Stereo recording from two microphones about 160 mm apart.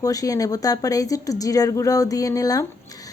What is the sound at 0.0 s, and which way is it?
Speech, 20° left (ahead or behind).